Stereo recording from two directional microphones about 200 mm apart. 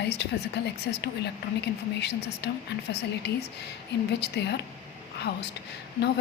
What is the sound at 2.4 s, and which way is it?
A woman's voice, 55° left (ahead or behind).